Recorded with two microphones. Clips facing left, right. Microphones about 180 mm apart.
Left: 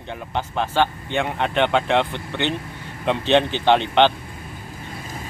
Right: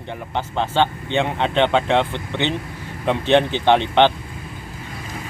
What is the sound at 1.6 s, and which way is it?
Speech, 15° right (ahead or behind).